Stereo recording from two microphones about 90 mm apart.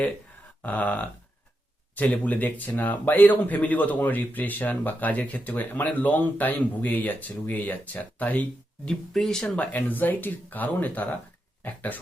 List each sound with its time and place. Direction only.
0.6 s speech: 15° left (ahead or behind)
9.7 s speech: 20° left (ahead or behind)